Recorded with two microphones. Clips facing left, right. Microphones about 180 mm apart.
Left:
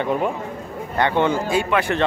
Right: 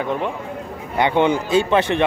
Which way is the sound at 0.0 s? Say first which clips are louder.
Left 2 dB; 5° left (ahead or behind).